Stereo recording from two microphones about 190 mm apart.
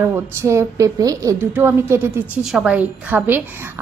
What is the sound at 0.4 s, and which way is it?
A woman's voice, 15° right (ahead or behind).